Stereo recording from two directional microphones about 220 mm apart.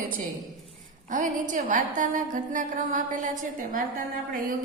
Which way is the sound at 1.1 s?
35° right (ahead or behind).